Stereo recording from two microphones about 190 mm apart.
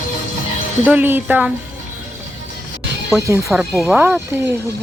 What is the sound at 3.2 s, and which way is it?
Speech, 15° right (ahead or behind).